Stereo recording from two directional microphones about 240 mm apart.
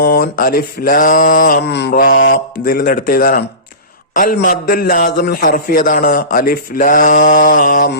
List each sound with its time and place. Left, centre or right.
0.0 s a man's voice: left